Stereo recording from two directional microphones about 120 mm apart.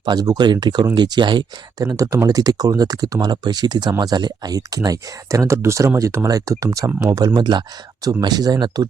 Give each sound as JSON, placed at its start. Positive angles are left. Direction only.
{"t": 0.0, "sound": "speech", "side_deg": -35}